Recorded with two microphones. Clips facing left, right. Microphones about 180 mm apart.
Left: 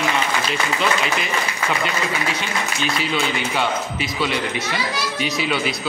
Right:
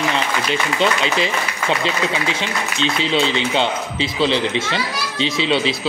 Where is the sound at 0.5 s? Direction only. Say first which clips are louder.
Right 4 dB; 30° right (ahead or behind).